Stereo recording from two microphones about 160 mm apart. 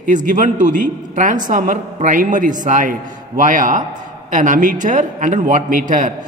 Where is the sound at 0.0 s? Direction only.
55° right (ahead or behind).